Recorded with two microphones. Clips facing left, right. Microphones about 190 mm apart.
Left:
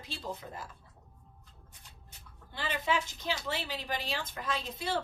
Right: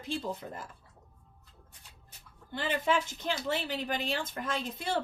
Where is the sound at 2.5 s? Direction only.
50° right (ahead or behind).